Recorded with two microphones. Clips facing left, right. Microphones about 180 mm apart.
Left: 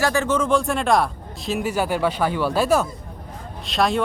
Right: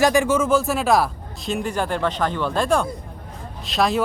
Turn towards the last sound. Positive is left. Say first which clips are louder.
# even
turn(degrees=0)  # may be behind; listen again after turning